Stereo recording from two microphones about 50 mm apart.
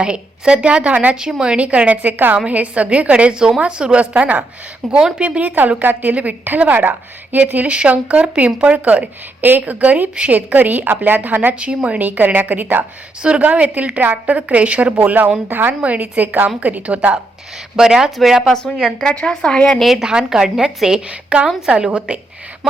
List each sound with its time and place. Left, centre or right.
0.0 s a woman's voice: right
4.8 s speech: centre
5.2 s a woman's voice: right
5.5 s a woman's voice: right
11.5 s a woman's voice: right
13.2 s a woman's voice: right
14.3 s a woman's voice: right
17.7 s a woman's voice: centre
18.8 s a woman's voice: centre
19.4 s speech: left
20.0 s a woman's voice: centre
21.1 s a woman's voice: right